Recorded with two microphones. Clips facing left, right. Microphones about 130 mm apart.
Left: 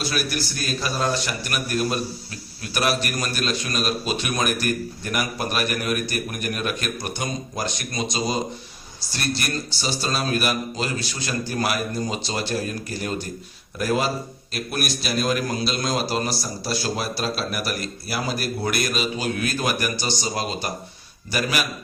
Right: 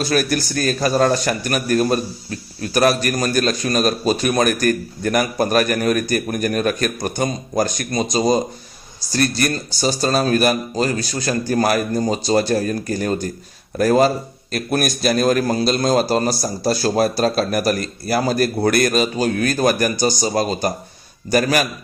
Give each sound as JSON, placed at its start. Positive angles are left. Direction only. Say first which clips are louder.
{"t": 0.0, "sound": "a man's voice", "louder": "right 7 dB", "side_deg": -45}